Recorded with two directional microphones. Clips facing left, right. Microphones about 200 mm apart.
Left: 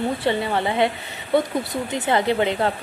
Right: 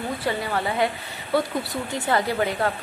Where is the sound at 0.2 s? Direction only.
25° left (ahead or behind).